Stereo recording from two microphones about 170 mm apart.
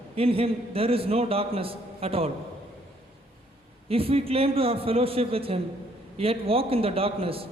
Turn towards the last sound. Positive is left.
turn(degrees=-35)  # may be behind; listen again after turning